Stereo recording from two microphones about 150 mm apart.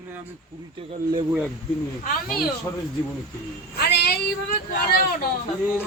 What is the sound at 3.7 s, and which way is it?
Speech, 90° left.